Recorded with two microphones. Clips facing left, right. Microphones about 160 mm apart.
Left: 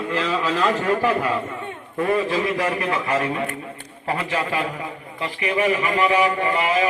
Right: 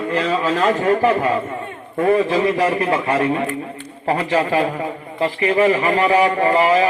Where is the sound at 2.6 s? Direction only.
30° right (ahead or behind).